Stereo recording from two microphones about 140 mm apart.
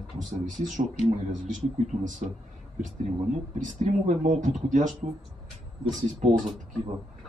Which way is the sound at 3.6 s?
60° right (ahead or behind).